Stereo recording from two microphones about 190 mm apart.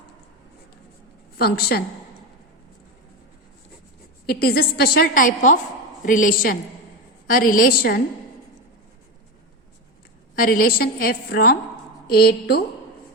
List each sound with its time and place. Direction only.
1.4 s a woman's voice: 55° left (ahead or behind)
4.3 s a woman's voice: 55° left (ahead or behind)
10.4 s a woman's voice: 50° left (ahead or behind)